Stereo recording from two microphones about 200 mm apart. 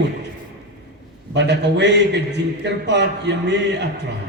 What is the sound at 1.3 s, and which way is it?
A man's voice, 60° right (ahead or behind).